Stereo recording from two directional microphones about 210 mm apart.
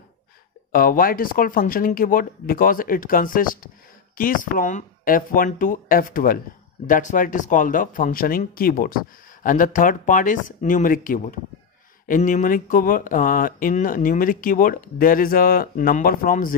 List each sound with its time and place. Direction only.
0.7 s speech: 40° left (ahead or behind)